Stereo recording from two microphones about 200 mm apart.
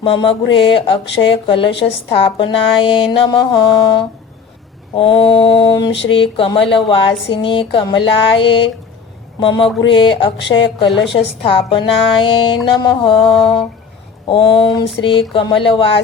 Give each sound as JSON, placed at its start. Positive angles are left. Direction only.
{"t": 0.0, "sound": "speech", "side_deg": 25}